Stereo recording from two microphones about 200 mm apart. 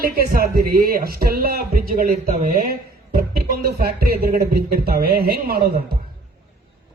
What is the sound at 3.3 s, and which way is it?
A man's voice, 50° right (ahead or behind).